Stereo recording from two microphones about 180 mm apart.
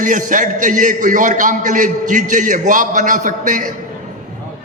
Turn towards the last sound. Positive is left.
turn(degrees=-45)  # may be behind; listen again after turning